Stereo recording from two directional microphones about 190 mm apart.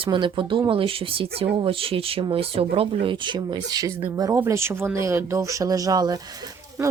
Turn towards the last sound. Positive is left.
turn(degrees=-20)  # may be behind; listen again after turning